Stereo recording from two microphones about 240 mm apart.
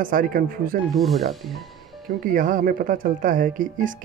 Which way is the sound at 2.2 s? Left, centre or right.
Right.